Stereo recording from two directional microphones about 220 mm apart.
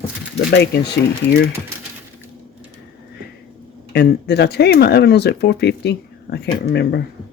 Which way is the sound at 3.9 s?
50° left (ahead or behind).